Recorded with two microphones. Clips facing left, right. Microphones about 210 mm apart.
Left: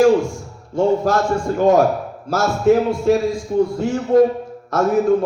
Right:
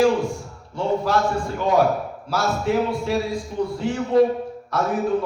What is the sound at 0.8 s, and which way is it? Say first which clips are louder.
Speech: left 5 dB; 45° left (ahead or behind).